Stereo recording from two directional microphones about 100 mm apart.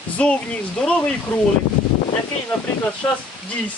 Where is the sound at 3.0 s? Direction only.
20° left (ahead or behind).